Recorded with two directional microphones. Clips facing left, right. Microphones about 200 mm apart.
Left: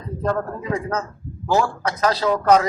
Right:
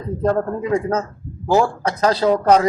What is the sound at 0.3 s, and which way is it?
A man's voice, 25° right (ahead or behind).